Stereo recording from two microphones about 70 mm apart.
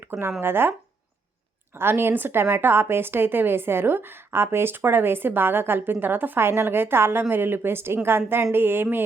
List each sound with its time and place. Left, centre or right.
0.1 s a woman's voice: right
1.7 s a woman's voice: right